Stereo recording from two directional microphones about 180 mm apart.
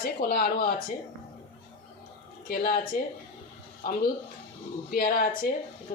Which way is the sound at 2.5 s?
55° left (ahead or behind).